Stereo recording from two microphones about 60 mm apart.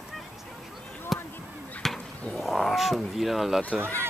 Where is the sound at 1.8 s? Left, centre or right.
Centre.